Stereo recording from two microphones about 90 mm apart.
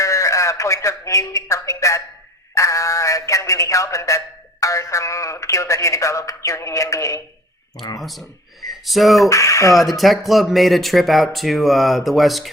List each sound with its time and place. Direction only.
0.0 s a man's voice: 35° left (ahead or behind)
8.0 s speech: centre (ahead or behind)
9.3 s speech: 35° left (ahead or behind)
10.0 s speech: centre (ahead or behind)